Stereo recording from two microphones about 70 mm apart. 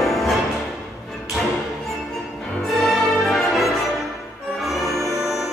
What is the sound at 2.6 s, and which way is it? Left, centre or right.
Music, centre.